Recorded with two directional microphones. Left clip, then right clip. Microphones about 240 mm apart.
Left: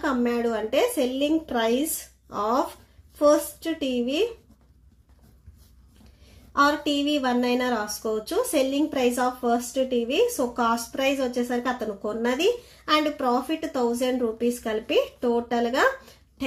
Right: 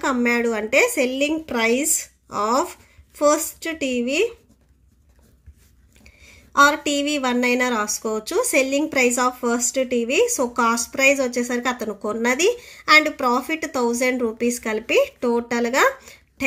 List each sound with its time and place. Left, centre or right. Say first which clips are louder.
0.0 s speech: right 4 dB; right
6.5 s speech: right 5 dB; right